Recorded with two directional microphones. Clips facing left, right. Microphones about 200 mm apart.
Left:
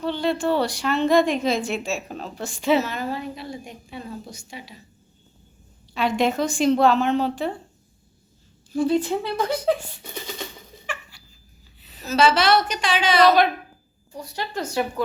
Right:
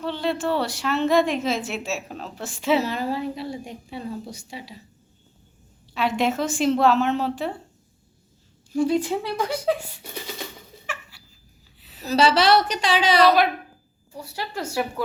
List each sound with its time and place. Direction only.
0.0 s a woman's voice: centre (ahead or behind)
2.8 s a woman's voice: 30° right (ahead or behind)
5.9 s a woman's voice: centre (ahead or behind)
8.7 s speech: 10° right (ahead or behind)
10.7 s a sound: 5° right (ahead or behind)
12.0 s a woman's voice: 35° right (ahead or behind)
13.2 s a woman's voice: 5° right (ahead or behind)